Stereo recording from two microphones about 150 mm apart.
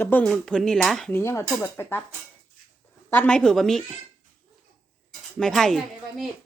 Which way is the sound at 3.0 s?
10° left (ahead or behind).